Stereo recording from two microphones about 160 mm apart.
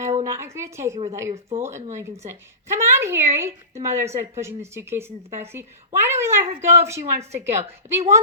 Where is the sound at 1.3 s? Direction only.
40° right (ahead or behind).